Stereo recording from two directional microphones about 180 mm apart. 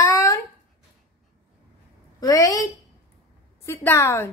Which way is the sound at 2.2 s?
20° left (ahead or behind).